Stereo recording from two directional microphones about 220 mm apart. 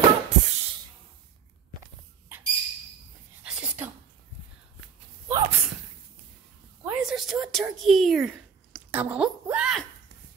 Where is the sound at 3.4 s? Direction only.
5° right (ahead or behind).